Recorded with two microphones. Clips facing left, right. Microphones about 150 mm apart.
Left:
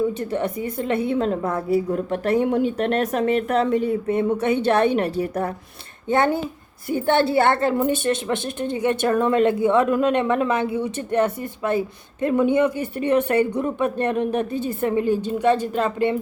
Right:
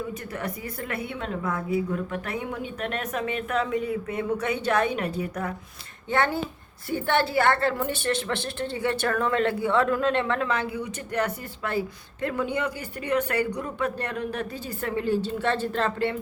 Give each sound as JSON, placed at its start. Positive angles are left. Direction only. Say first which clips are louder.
{"t": 0.3, "sound": "a woman's voice", "louder": "left 8 dB", "side_deg": 25}
{"t": 6.1, "sound": "a woman's voice", "louder": "left 5 dB", "side_deg": 20}